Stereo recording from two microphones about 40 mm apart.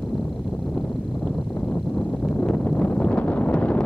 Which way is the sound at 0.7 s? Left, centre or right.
Left.